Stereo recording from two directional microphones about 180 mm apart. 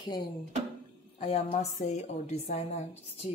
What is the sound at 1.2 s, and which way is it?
A woman's voice, 35° left (ahead or behind).